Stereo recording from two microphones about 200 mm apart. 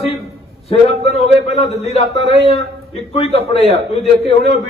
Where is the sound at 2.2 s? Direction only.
30° left (ahead or behind).